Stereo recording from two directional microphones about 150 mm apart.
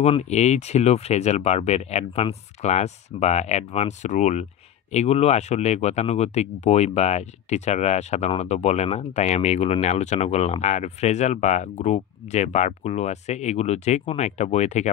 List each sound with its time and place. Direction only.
0.0 s speech: 45° left (ahead or behind)